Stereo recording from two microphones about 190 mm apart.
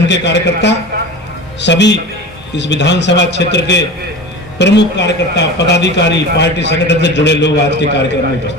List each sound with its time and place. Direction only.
0.1 s a man's voice: 65° left (ahead or behind)